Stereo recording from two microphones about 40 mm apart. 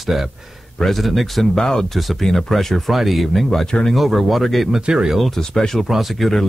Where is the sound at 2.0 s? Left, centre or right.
Centre.